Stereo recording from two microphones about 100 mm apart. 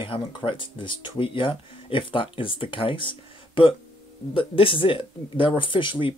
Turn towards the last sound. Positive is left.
turn(degrees=55)  # may be behind; listen again after turning